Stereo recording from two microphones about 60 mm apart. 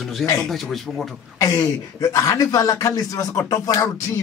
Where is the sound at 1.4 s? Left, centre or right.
Left.